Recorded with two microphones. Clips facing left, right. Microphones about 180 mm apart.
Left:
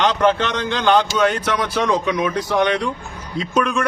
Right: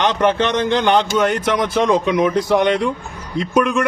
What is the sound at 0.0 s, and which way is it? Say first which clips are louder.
A man's voice: right 1 dB; 20° right (ahead or behind).